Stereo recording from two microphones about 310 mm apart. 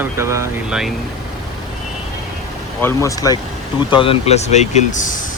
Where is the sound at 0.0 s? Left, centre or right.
Centre.